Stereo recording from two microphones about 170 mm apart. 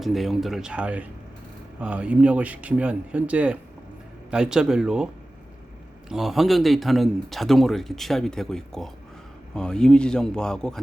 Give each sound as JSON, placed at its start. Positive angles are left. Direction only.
{"t": 0.0, "sound": "a man's voice", "side_deg": 0}
{"t": 6.1, "sound": "a man's voice", "side_deg": 0}